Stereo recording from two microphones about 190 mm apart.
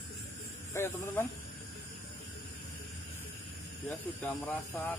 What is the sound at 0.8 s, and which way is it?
Speech, 15° left (ahead or behind).